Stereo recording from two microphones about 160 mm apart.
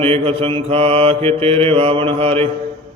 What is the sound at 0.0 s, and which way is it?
Mantra, 35° right (ahead or behind).